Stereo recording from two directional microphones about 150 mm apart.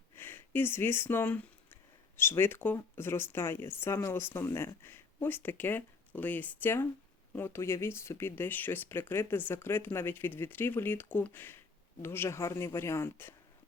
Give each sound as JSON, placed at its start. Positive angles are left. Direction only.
{"t": 0.2, "sound": "speech", "side_deg": 15}